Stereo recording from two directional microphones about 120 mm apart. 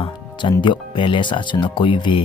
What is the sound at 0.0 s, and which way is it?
Speech, 40° left (ahead or behind).